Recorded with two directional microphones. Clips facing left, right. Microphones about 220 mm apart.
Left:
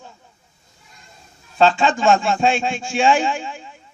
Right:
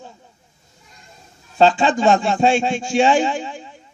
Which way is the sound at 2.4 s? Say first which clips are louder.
Right 3 dB; 40° right (ahead or behind).